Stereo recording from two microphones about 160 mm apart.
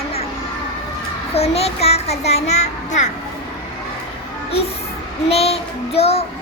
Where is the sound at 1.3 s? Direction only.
40° left (ahead or behind).